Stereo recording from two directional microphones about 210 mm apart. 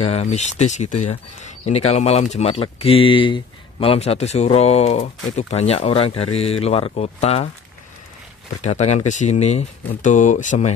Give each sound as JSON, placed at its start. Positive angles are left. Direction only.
{"t": 0.0, "sound": "speech", "side_deg": 30}
{"t": 8.5, "sound": "speech", "side_deg": 30}